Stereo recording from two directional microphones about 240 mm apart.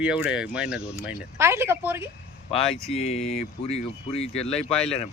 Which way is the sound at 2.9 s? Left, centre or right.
Left.